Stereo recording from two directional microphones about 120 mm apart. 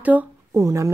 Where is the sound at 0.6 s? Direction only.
25° right (ahead or behind).